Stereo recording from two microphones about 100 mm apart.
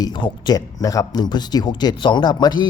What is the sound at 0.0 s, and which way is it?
Speech, 45° left (ahead or behind).